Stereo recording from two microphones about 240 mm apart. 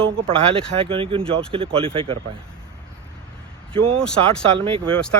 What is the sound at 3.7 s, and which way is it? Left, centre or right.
Speech, right.